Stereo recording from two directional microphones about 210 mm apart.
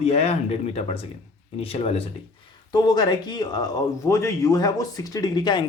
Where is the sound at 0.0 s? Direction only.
30° left (ahead or behind).